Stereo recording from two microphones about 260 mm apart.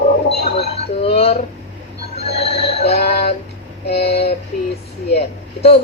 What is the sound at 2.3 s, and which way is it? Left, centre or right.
Music, left.